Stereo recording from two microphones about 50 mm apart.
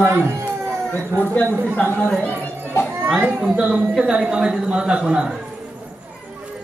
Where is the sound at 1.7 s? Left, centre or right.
Left.